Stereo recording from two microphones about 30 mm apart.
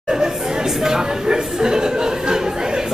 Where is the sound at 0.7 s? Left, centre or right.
Centre.